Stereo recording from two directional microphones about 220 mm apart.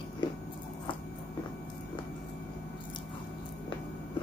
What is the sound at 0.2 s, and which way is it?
Biting, 20° left (ahead or behind).